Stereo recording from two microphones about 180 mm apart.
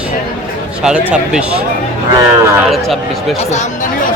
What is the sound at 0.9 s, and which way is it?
Speech, 5° right (ahead or behind).